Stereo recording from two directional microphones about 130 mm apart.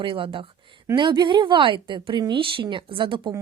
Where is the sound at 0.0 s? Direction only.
40° right (ahead or behind).